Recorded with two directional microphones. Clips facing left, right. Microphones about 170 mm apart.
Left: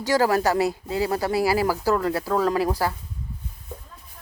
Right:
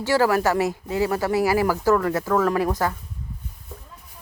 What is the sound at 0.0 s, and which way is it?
Speech, 40° left (ahead or behind).